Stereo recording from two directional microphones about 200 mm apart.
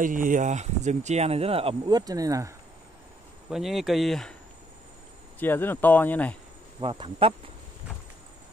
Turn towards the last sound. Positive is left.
turn(degrees=-25)  # may be behind; listen again after turning